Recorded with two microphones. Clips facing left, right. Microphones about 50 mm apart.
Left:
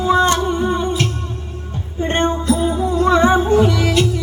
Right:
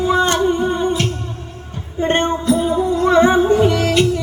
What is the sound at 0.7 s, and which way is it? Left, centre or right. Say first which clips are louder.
Music: right 1 dB; centre.